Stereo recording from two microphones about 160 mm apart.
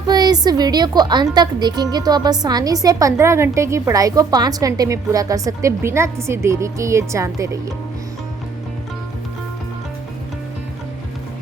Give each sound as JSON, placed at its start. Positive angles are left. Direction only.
{"t": 0.1, "sound": "a woman's voice", "side_deg": -25}